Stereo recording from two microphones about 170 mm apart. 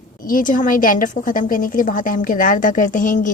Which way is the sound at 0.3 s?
55° left (ahead or behind).